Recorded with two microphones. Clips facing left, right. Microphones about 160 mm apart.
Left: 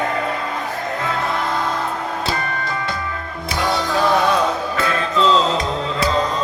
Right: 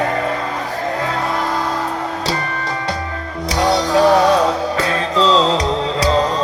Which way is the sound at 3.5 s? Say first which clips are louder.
Right 5 dB; 40° right (ahead or behind).